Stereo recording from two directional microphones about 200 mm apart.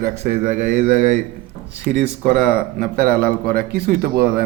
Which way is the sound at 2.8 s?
50° right (ahead or behind).